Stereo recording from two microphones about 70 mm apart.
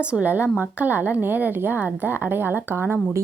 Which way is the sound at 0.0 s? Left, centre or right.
Centre.